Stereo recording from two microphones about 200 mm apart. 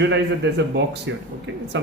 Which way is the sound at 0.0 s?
60° right (ahead or behind).